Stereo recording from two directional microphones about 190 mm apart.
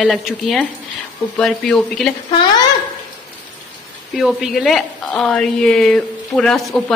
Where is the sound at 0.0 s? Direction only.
Centre (ahead or behind).